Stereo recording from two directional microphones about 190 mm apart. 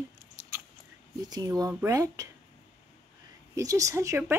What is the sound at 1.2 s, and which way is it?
A woman's voice, 20° right (ahead or behind).